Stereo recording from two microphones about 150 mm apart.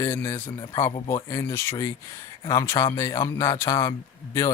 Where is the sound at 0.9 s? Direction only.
35° left (ahead or behind).